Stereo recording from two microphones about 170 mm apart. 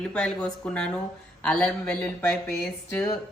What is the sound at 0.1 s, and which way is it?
A woman's voice, 5° left (ahead or behind).